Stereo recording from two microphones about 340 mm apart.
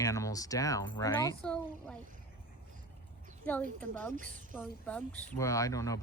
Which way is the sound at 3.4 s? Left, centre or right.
Centre.